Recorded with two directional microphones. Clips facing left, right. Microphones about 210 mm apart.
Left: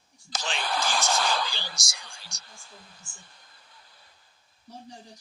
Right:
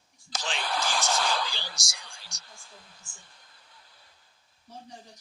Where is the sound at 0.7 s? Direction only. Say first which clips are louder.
Left 2 dB; 50° left (ahead or behind).